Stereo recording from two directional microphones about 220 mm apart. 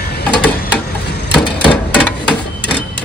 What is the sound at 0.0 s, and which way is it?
Printer, 45° left (ahead or behind).